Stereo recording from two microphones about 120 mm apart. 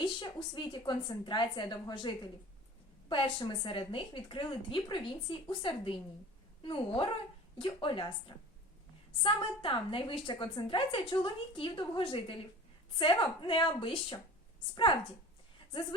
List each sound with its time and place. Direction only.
0.0 s a woman's voice: 40° left (ahead or behind)
9.2 s a woman's voice: 45° left (ahead or behind)